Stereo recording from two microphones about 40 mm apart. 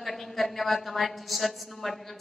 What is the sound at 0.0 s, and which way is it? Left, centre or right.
A woman's voice, centre.